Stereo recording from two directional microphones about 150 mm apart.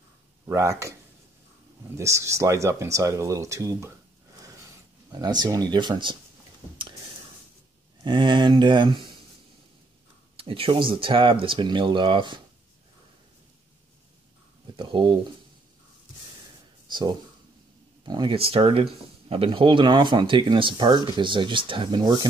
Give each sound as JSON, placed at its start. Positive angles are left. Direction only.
{"t": 0.5, "sound": "speech", "side_deg": -20}
{"t": 2.0, "sound": "speech", "side_deg": -20}
{"t": 5.1, "sound": "speech", "side_deg": -30}
{"t": 8.0, "sound": "speech", "side_deg": -30}
{"t": 10.3, "sound": "speech", "side_deg": -35}
{"t": 14.8, "sound": "speech", "side_deg": -35}
{"t": 16.8, "sound": "a sound", "side_deg": -30}
{"t": 18.0, "sound": "speech", "side_deg": -30}